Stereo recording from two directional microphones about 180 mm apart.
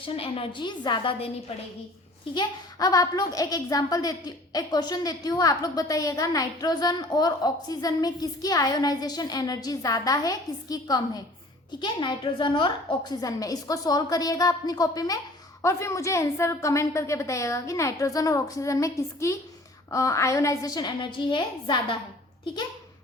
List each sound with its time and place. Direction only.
0.0 s a woman's voice: 30° left (ahead or behind)
2.3 s a woman's voice: 20° left (ahead or behind)